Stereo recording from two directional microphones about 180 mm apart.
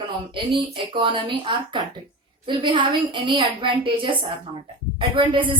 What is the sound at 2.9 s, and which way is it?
A woman's voice, 25° right (ahead or behind).